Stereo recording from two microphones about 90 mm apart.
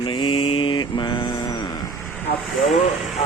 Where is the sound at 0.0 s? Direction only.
65° left (ahead or behind).